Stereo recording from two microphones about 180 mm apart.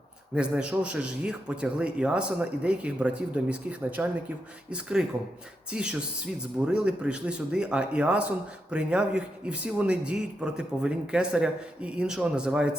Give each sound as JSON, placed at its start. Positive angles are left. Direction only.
{"t": 0.3, "sound": "a man's voice", "side_deg": -5}